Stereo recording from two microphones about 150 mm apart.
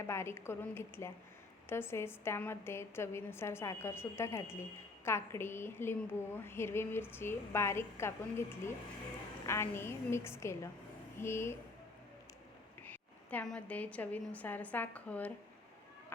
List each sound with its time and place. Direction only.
0.0 s a woman's voice: 15° left (ahead or behind)
12.8 s a woman's voice: 10° left (ahead or behind)